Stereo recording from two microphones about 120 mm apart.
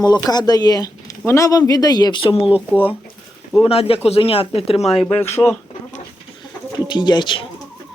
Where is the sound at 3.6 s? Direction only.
55° left (ahead or behind).